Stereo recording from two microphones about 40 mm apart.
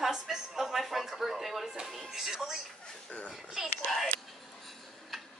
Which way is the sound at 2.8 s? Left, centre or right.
Left.